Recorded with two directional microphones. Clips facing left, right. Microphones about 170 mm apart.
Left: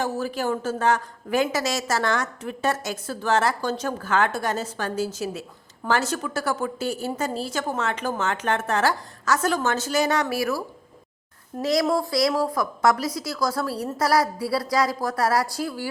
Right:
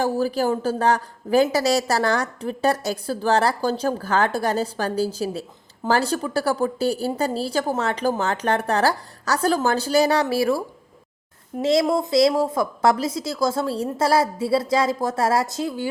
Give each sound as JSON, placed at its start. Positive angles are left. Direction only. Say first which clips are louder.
{"t": 0.0, "sound": "a man's voice", "louder": "right 5 dB", "side_deg": -35}
{"t": 11.6, "sound": "a woman's voice", "louder": "right 3 dB", "side_deg": -25}